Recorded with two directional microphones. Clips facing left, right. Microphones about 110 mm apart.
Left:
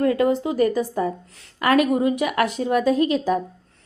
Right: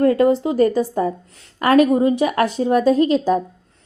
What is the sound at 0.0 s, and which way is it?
A woman's voice, 35° right (ahead or behind).